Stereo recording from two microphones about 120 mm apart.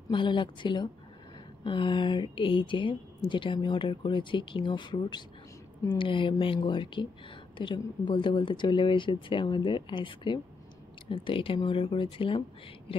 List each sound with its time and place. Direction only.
0.1 s speech: 45° left (ahead or behind)